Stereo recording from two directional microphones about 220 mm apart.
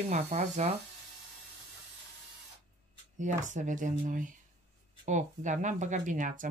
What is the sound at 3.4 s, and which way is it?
Speech, 35° right (ahead or behind).